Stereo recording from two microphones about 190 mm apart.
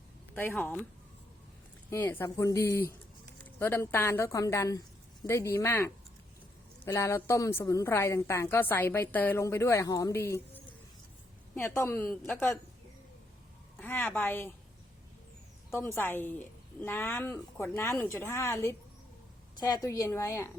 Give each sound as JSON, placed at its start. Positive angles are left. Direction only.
{"t": 0.3, "sound": "a woman's voice", "side_deg": 10}
{"t": 1.9, "sound": "a woman's voice", "side_deg": 15}
{"t": 13.7, "sound": "a woman's voice", "side_deg": 10}
{"t": 15.7, "sound": "a woman's voice", "side_deg": 10}